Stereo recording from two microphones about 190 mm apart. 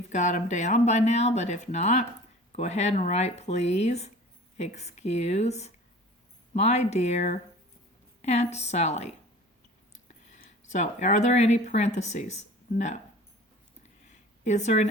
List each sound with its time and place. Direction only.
0.1 s speech: 40° left (ahead or behind)
10.7 s speech: 40° left (ahead or behind)
14.1 s a sound: 40° left (ahead or behind)